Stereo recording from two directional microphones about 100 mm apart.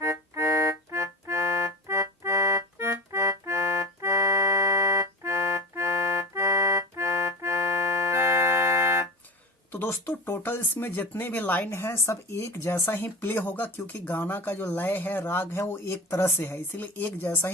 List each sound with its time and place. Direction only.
0.0 s organ: 30° right (ahead or behind)
1.9 s music: 30° right (ahead or behind)
9.7 s speech: 20° left (ahead or behind)